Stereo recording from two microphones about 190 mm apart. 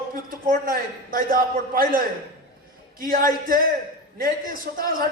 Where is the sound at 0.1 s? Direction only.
45° right (ahead or behind).